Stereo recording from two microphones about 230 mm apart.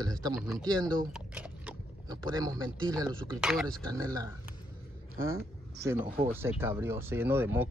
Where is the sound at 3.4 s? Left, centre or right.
Centre.